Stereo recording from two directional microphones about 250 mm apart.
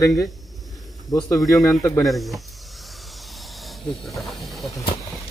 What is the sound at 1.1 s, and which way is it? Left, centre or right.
Speech, centre.